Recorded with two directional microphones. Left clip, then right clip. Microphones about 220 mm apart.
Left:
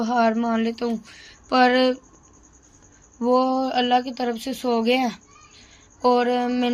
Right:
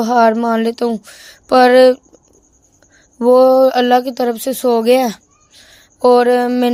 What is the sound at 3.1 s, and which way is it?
Speech, 50° right (ahead or behind).